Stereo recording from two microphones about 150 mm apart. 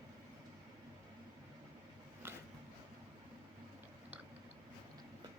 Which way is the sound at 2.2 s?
15° right (ahead or behind).